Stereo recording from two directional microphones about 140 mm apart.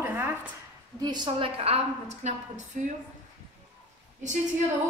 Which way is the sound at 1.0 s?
30° right (ahead or behind).